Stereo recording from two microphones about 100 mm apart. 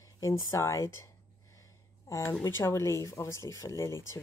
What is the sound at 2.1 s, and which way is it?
A woman's voice, 30° left (ahead or behind).